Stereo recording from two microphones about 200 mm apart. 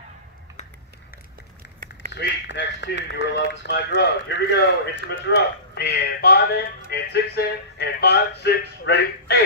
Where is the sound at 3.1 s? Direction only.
60° left (ahead or behind).